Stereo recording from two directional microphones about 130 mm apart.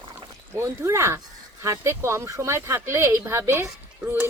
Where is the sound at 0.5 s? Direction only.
20° right (ahead or behind).